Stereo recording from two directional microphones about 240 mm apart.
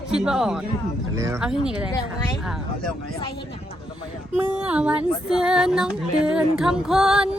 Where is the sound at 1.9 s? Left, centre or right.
Centre.